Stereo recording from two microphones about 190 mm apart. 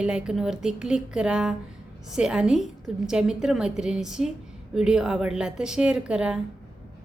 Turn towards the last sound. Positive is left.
turn(degrees=-5)  # may be behind; listen again after turning